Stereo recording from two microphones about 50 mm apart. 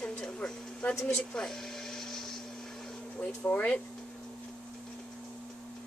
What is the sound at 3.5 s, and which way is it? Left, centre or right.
Speech, left.